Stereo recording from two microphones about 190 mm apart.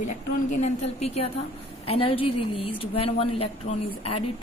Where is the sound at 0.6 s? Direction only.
35° left (ahead or behind).